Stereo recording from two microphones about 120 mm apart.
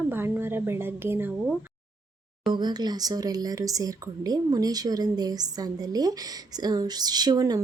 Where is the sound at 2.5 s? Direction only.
35° right (ahead or behind).